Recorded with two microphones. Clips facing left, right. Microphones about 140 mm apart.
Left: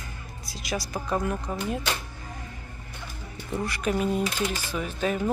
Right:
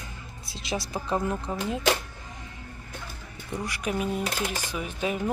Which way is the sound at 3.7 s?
10° right (ahead or behind).